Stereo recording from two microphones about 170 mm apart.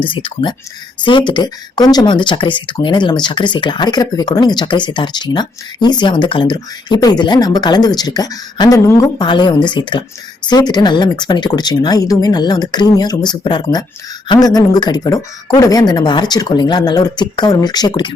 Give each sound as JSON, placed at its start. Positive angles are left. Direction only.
{"t": 0.0, "sound": "speech", "side_deg": 30}